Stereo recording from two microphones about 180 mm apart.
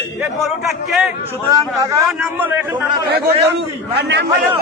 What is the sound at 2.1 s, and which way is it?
Speech, 5° right (ahead or behind).